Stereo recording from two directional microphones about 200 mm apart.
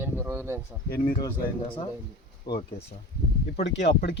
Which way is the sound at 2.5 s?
20° left (ahead or behind).